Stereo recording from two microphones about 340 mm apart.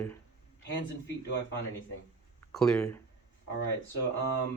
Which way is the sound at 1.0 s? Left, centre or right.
Left.